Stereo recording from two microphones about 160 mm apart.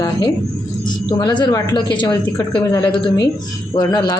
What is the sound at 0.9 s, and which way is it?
Speech, 30° left (ahead or behind).